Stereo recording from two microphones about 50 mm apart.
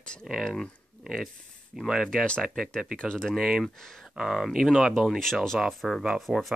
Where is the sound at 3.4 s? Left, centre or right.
Centre.